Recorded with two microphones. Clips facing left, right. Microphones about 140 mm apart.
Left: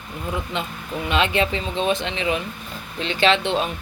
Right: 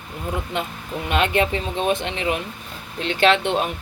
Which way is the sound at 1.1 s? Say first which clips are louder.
Right 1 dB; 50° right (ahead or behind).